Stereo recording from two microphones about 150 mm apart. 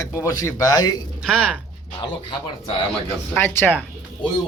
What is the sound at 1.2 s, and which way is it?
Speech, 5° left (ahead or behind).